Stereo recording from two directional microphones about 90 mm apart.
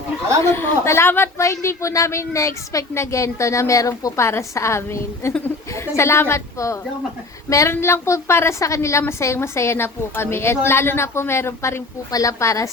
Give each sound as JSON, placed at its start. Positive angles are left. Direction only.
{"t": 0.4, "sound": "a woman's voice", "side_deg": 30}